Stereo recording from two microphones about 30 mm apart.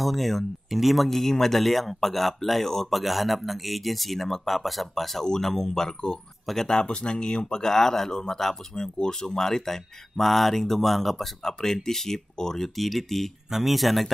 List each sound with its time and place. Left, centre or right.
0.0 s speech: centre
0.7 s speech: centre
0.9 s speech: centre
2.9 s speech: centre; by 7.6 s left
7.6 s speech: centre
8.7 s speech: left
9.1 s speech: centre
11.4 s speech: centre
12.7 s speech: centre